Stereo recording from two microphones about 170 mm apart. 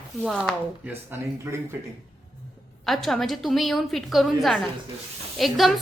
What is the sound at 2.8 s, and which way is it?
A woman's voice, centre (ahead or behind).